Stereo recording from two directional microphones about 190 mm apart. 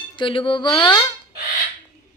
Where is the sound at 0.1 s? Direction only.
25° left (ahead or behind).